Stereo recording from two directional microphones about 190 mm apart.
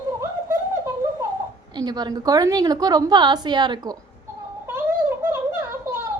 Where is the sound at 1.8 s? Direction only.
20° right (ahead or behind).